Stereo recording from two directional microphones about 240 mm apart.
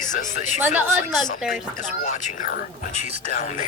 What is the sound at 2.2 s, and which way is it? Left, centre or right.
Speech, left.